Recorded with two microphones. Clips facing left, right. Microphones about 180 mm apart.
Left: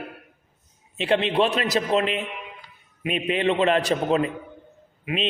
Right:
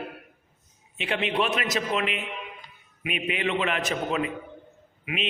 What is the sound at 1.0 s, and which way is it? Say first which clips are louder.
A man's voice: left 6 dB; 35° left (ahead or behind).